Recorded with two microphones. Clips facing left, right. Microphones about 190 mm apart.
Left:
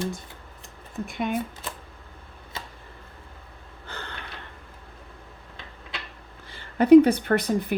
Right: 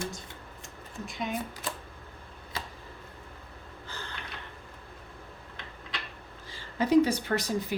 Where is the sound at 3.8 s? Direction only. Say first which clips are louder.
Left 4 dB; 60° left (ahead or behind).